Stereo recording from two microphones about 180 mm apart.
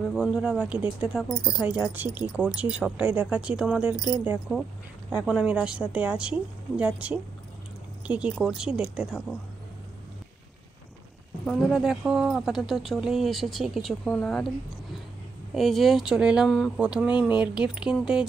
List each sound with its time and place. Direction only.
0.1 s speech: 5° right (ahead or behind)
8.1 s speech: 5° right (ahead or behind)
11.4 s speech: centre (ahead or behind)
15.5 s speech: centre (ahead or behind)